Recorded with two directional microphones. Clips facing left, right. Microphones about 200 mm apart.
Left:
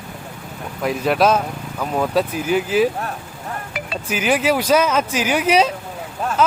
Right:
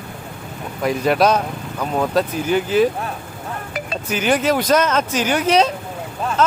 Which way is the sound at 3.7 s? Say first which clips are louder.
Right 2 dB; 45° right (ahead or behind).